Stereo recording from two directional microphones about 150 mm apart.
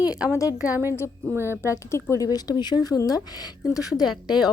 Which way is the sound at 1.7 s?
20° left (ahead or behind).